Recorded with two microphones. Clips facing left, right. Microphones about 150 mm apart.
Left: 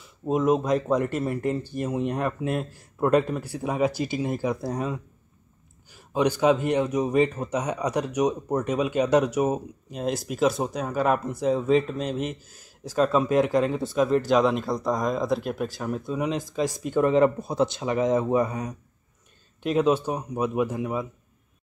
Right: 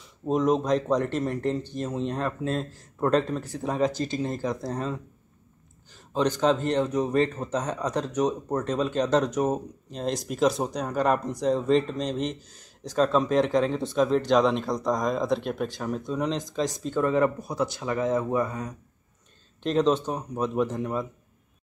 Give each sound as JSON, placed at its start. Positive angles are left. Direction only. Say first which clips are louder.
{"t": 0.0, "sound": "speech", "louder": "left 1 dB", "side_deg": 5}
{"t": 19.6, "sound": "speech", "louder": "left 1 dB", "side_deg": 10}